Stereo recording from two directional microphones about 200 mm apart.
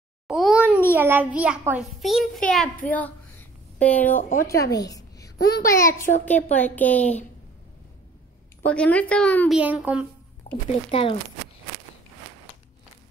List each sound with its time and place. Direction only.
0.3 s a sound: centre (ahead or behind)
0.9 s a child's voice: 10° right (ahead or behind); by 4.1 s 10° left (ahead or behind)
4.1 s speech: 45° left (ahead or behind)
4.7 s a sound: 20° left (ahead or behind)
5.5 s a woman's voice: 15° left (ahead or behind)
8.6 s a woman's voice: 5° left (ahead or behind)
9.5 s a child's voice: 5° right (ahead or behind)
10.4 s a sound: 30° left (ahead or behind)
10.9 s speech: 25° left (ahead or behind)